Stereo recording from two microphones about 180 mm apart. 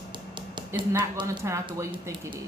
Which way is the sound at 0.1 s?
25° right (ahead or behind).